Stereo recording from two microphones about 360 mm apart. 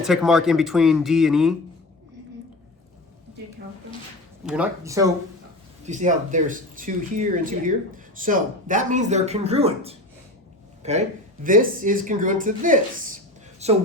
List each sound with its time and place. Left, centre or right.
0.0 s speech: centre
4.4 s speech: centre
5.8 s speech: centre